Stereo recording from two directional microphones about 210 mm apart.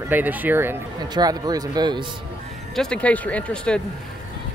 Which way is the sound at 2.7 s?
5° left (ahead or behind).